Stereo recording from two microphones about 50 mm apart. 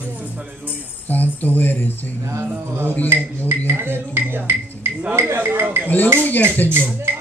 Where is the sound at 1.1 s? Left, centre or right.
Left.